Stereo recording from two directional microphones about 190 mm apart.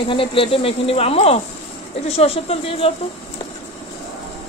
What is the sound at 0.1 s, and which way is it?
A woman's voice, 30° left (ahead or behind).